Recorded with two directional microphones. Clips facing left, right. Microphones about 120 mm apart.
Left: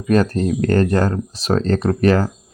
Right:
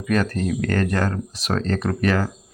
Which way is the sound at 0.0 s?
30° left (ahead or behind).